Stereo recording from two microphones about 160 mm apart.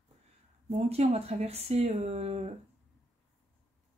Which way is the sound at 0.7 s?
40° right (ahead or behind).